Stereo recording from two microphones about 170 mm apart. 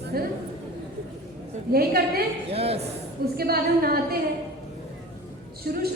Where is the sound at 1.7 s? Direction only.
60° right (ahead or behind).